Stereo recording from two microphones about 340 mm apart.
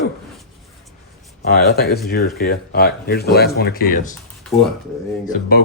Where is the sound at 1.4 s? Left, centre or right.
Left.